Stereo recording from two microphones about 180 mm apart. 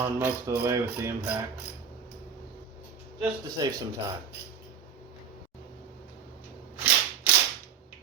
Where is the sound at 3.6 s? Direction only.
20° right (ahead or behind).